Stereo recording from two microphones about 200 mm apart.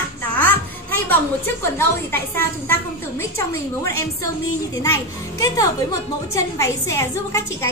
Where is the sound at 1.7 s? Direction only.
10° left (ahead or behind).